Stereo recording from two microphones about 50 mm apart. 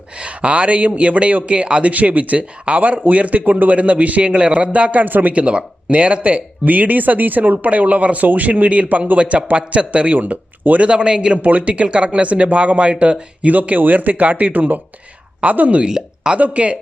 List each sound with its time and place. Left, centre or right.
0.2 s a man's voice: right
5.3 s a man's voice: right
10.2 s a man's voice: right; by 11.3 s centre
11.4 s a man's voice: right
15.9 s speech: centre
16.4 s a man's voice: right